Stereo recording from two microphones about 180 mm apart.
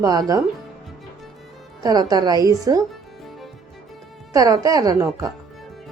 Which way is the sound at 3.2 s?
Centre (ahead or behind).